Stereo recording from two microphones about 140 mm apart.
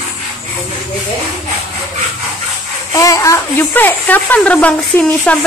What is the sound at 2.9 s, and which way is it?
A woman's voice, 25° left (ahead or behind).